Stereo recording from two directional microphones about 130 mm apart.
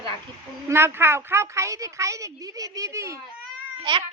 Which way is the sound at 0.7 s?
20° right (ahead or behind).